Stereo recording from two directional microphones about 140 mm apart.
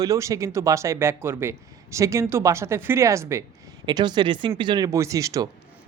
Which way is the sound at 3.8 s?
30° right (ahead or behind).